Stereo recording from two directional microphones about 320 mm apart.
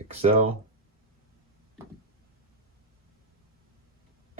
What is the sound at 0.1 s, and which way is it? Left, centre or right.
Speech, centre.